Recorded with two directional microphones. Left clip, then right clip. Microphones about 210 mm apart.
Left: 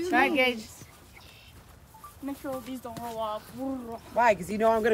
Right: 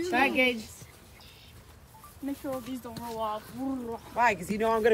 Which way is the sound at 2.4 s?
Centre (ahead or behind).